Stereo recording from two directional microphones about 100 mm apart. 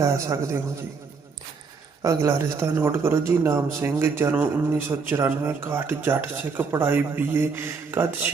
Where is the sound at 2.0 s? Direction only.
30° right (ahead or behind).